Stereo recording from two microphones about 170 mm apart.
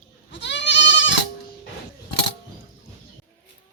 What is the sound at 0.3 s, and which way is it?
Goat, 90° left.